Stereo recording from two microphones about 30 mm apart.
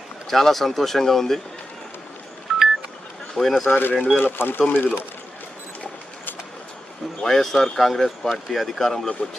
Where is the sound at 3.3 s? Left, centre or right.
Centre.